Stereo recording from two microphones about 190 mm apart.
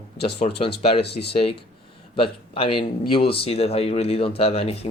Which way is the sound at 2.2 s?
30° left (ahead or behind).